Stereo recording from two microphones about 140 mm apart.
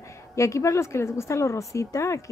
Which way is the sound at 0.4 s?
20° left (ahead or behind).